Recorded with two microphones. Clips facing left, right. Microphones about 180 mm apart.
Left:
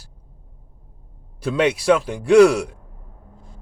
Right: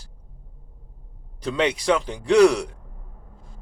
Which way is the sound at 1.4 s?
10° left (ahead or behind).